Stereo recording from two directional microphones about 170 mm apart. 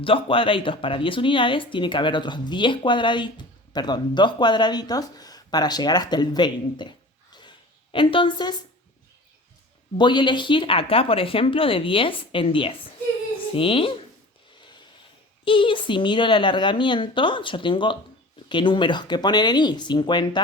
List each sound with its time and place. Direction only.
0.0 s speech: 30° left (ahead or behind)
7.9 s speech: 30° left (ahead or behind)
10.0 s speech: 25° left (ahead or behind)
15.4 s speech: 30° left (ahead or behind)